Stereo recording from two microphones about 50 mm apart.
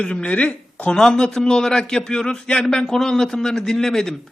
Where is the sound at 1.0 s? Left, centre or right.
Centre.